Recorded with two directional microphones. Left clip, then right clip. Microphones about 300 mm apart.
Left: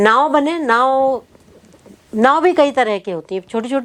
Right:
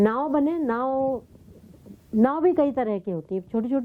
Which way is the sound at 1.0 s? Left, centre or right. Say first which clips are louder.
Left 10 dB; centre.